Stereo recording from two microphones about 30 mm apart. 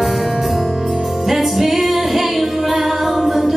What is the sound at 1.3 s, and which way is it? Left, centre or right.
Music, centre.